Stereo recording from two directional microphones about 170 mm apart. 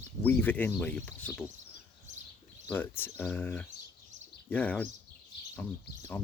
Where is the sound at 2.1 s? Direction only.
45° right (ahead or behind).